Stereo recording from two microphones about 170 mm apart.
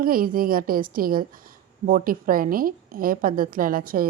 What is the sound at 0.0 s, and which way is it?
A woman's voice, 55° right (ahead or behind).